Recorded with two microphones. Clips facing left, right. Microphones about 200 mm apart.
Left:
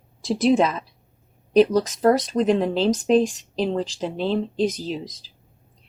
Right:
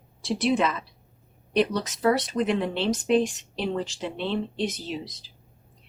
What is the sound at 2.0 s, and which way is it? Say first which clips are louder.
Speech: left 2 dB; 40° left (ahead or behind).